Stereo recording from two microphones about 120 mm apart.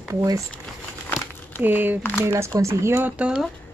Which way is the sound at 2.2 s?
20° right (ahead or behind).